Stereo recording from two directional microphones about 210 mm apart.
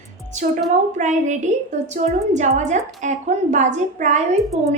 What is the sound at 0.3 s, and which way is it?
A woman's voice, 35° right (ahead or behind).